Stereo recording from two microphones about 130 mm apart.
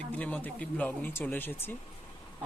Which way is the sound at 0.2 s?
10° left (ahead or behind).